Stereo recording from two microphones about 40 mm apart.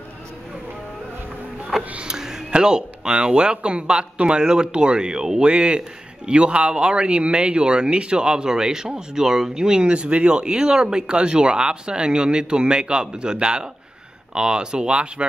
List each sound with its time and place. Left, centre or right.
1.8 s music: right
2.1 s speech: centre
5.5 s speech: right